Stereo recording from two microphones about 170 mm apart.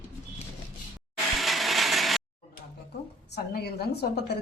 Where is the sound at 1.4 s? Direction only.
Centre (ahead or behind).